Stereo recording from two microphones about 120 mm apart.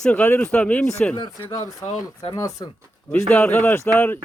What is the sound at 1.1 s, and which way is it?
Speech, 35° left (ahead or behind).